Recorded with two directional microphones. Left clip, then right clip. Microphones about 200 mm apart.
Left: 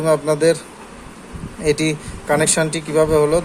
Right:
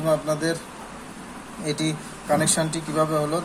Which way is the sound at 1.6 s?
45° left (ahead or behind).